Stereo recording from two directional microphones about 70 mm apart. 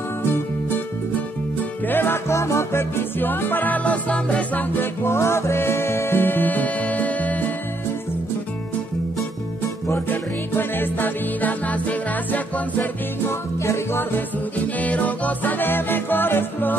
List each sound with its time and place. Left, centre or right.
1.6 s music: left
5.0 s music: left
9.8 s music: left
13.3 s music: left
14.8 s music: left